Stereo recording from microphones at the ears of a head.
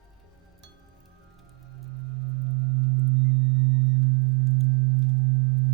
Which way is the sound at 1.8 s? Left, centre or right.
Right.